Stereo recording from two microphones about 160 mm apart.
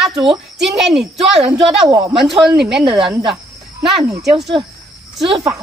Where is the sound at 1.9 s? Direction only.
20° right (ahead or behind).